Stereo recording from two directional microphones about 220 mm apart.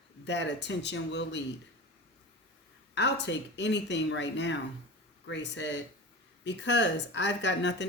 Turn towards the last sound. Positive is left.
turn(degrees=55)  # may be behind; listen again after turning